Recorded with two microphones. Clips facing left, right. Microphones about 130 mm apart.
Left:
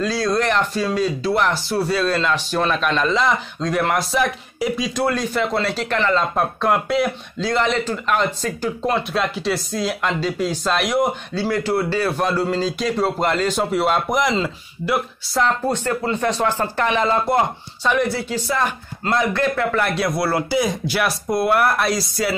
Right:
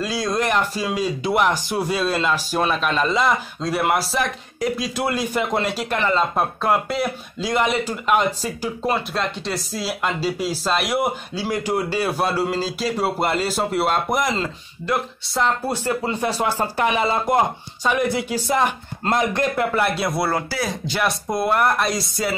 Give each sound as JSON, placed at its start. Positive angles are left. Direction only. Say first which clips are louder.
{"t": 0.0, "sound": "speech", "louder": "left 3 dB", "side_deg": -15}
{"t": 7.4, "sound": "speech", "louder": "left 1 dB", "side_deg": -10}
{"t": 15.8, "sound": "speech", "louder": "left 1 dB", "side_deg": -15}
{"t": 20.4, "sound": "speech", "louder": "left 6 dB", "side_deg": 15}